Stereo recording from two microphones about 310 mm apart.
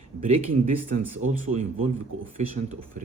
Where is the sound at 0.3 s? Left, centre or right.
Centre.